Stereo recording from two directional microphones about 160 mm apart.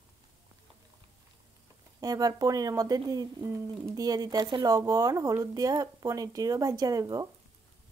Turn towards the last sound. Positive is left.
turn(degrees=-25)  # may be behind; listen again after turning